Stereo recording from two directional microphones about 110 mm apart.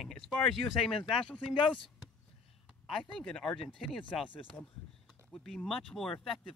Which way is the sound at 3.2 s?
10° left (ahead or behind).